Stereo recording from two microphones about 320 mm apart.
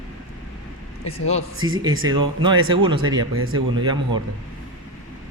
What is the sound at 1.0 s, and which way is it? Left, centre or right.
Speech, centre.